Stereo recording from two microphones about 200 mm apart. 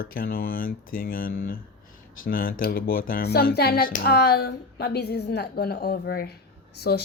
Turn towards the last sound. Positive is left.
turn(degrees=55)  # may be behind; listen again after turning